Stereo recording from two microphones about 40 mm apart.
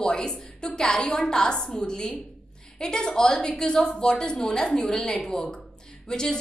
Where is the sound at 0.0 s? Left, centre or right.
Centre.